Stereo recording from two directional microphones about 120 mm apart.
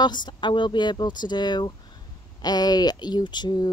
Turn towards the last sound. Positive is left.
turn(degrees=35)  # may be behind; listen again after turning